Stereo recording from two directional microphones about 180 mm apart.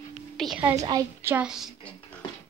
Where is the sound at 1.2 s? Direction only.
5° right (ahead or behind).